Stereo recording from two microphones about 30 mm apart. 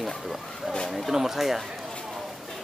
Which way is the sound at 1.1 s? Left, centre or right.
Centre.